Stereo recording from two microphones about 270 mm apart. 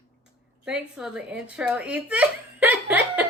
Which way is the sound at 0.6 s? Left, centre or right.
Centre.